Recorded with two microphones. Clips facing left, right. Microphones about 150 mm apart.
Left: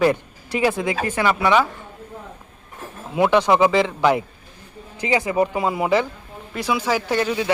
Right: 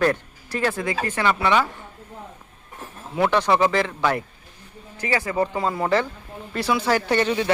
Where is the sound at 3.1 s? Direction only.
15° left (ahead or behind).